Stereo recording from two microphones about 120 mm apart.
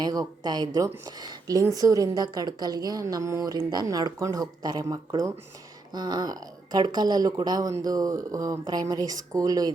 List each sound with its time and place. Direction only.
0.0 s speech: 35° right (ahead or behind)